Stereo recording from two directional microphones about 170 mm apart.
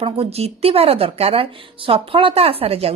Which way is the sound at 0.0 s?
35° right (ahead or behind).